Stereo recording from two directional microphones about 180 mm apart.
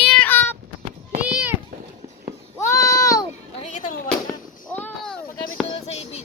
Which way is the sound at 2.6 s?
20° left (ahead or behind).